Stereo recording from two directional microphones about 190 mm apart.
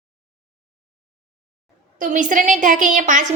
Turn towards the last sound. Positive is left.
turn(degrees=-40)  # may be behind; listen again after turning